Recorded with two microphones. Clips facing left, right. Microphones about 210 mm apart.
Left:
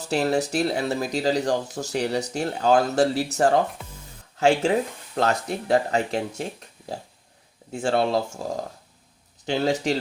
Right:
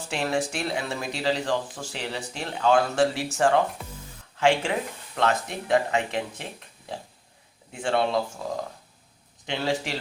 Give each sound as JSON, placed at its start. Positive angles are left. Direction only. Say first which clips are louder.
{"t": 0.0, "sound": "speech", "louder": "left 4 dB", "side_deg": 40}
{"t": 9.5, "sound": "speech", "louder": "left 5 dB", "side_deg": 40}